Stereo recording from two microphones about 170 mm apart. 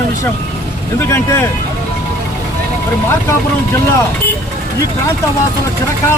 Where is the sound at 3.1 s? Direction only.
15° left (ahead or behind).